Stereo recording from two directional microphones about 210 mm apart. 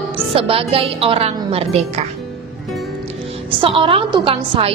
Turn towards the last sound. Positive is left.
turn(degrees=-25)  # may be behind; listen again after turning